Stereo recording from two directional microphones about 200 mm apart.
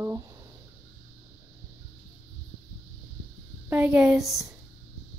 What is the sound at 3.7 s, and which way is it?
Speech, 5° right (ahead or behind).